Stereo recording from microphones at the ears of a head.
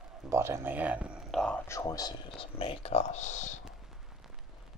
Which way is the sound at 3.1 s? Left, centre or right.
Left.